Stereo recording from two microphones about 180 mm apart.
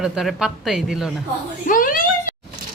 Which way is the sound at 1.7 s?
50° left (ahead or behind).